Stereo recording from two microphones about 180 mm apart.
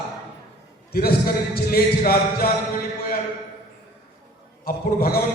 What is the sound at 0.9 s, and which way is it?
A man's voice, 55° left (ahead or behind).